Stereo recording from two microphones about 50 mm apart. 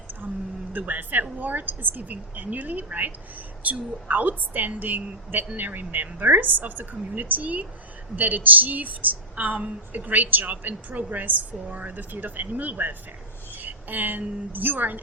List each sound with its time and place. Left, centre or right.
0.7 s a woman's voice: right